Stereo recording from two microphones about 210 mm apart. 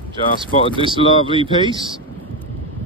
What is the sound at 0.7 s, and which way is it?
Speech, 25° right (ahead or behind).